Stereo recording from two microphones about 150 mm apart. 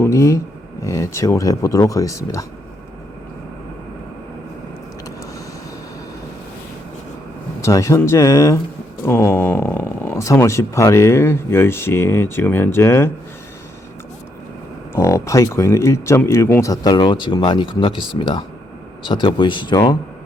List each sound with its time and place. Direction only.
0.0 s speech: 20° left (ahead or behind)
7.6 s speech: 20° left (ahead or behind)
14.9 s speech: 20° left (ahead or behind)